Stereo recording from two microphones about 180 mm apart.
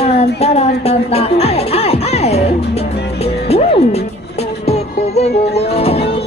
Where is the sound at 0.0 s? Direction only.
35° left (ahead or behind).